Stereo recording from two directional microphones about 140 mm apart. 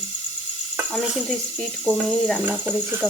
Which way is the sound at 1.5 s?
Centre (ahead or behind).